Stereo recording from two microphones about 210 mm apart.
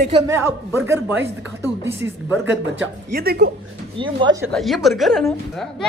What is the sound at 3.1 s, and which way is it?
Speech, 50° right (ahead or behind).